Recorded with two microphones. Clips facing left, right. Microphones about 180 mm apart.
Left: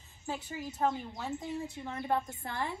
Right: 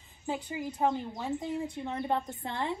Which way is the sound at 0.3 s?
20° right (ahead or behind).